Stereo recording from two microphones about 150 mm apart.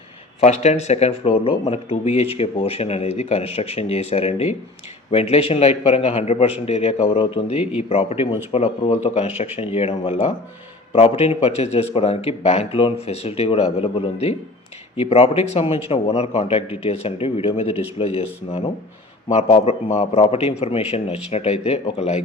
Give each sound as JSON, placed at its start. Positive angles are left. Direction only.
{"t": 0.3, "sound": "a man's voice", "side_deg": 50}